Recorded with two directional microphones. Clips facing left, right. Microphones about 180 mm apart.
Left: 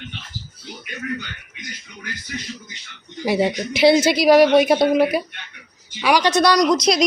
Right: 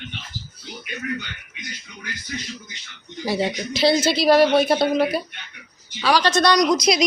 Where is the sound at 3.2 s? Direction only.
20° left (ahead or behind).